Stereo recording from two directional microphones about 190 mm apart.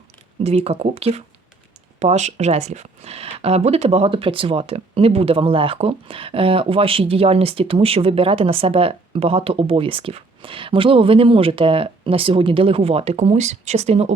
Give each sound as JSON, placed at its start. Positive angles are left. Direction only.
{"t": 0.4, "sound": "speech", "side_deg": -35}